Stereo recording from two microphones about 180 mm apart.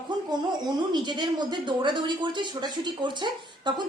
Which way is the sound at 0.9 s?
25° right (ahead or behind).